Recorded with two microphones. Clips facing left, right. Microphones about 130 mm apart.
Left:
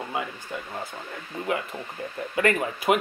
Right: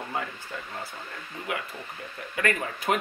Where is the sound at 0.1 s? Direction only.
15° left (ahead or behind).